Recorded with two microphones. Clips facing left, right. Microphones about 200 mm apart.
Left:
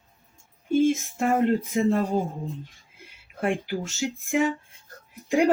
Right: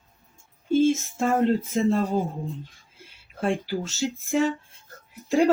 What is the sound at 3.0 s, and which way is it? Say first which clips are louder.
Speech: even; 15° left (ahead or behind).